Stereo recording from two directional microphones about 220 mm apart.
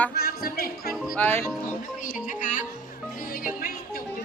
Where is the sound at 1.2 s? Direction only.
10° left (ahead or behind).